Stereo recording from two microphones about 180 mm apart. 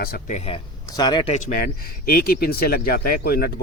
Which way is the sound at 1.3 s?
45° left (ahead or behind).